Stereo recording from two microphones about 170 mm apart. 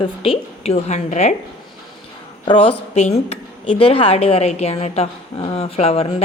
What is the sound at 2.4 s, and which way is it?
Speech, 35° left (ahead or behind).